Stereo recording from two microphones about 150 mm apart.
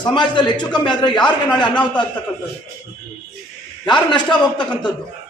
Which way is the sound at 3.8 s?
30° left (ahead or behind).